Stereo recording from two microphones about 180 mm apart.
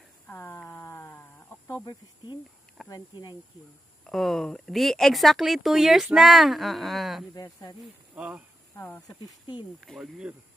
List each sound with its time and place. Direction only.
0.3 s a sound: 10° left (ahead or behind)
2.9 s speech: 25° left (ahead or behind)
4.0 s speech: centre (ahead or behind)
7.3 s speech: 20° left (ahead or behind)
8.1 s speech: 5° right (ahead or behind)
8.7 s speech: 15° left (ahead or behind)
9.8 s speech: centre (ahead or behind)